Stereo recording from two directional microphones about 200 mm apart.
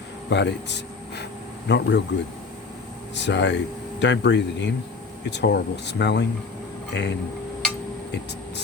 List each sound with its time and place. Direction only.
0.3 s speech: 60° left (ahead or behind)
3.2 s speech: 60° left (ahead or behind)